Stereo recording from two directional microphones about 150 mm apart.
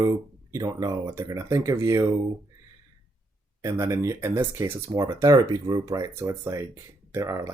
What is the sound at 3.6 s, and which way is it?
Speech, 20° right (ahead or behind).